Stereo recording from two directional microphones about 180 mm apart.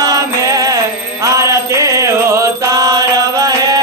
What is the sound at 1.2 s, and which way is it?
Chant, 15° right (ahead or behind).